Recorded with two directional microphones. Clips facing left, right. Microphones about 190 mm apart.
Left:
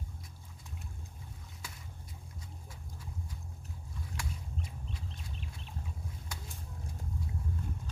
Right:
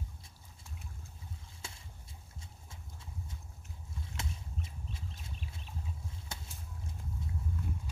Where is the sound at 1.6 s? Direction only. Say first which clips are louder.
Even; 25° right (ahead or behind).